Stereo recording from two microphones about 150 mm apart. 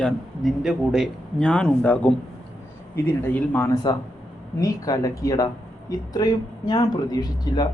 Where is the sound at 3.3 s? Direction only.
15° left (ahead or behind).